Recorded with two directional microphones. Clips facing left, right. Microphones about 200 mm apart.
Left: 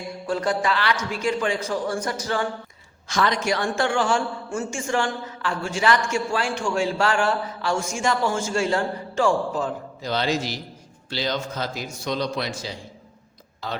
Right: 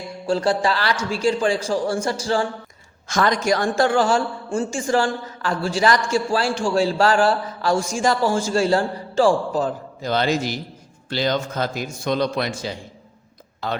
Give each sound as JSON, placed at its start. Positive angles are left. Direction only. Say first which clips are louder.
{"t": 0.3, "sound": "a man's voice", "louder": "right 4 dB", "side_deg": -30}
{"t": 3.1, "sound": "a man's voice", "louder": "right 3 dB", "side_deg": -45}